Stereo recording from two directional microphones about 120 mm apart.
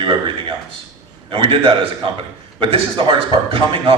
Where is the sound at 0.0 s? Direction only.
45° right (ahead or behind).